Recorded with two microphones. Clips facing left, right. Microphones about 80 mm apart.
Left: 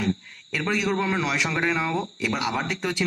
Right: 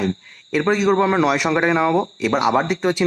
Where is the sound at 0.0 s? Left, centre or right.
Right.